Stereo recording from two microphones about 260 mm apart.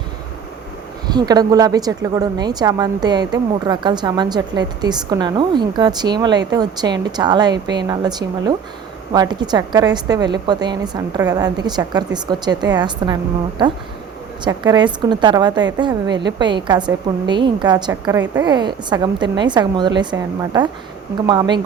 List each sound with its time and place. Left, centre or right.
1.0 s speech: centre
14.4 s speech: centre